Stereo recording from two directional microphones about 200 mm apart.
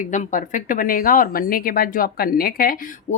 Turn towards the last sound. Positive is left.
turn(degrees=45)  # may be behind; listen again after turning